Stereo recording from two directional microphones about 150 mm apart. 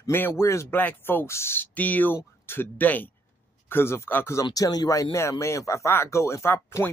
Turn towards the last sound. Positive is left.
turn(degrees=15)  # may be behind; listen again after turning